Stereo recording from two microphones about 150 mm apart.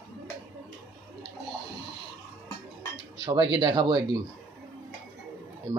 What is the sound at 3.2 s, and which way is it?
Speech, 35° right (ahead or behind).